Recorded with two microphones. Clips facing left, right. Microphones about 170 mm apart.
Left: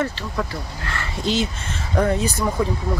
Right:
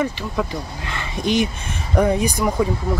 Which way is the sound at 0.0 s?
15° right (ahead or behind).